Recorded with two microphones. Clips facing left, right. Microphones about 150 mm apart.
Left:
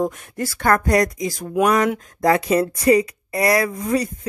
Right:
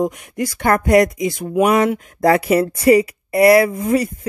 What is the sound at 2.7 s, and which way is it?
Speech, 25° right (ahead or behind).